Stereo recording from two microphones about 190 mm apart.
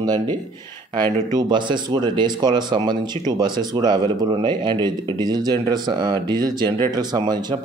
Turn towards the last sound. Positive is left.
turn(degrees=-20)  # may be behind; listen again after turning